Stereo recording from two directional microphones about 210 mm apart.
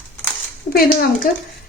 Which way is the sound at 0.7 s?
45° left (ahead or behind).